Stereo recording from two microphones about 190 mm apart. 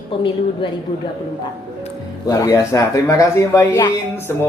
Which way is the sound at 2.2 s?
20° left (ahead or behind).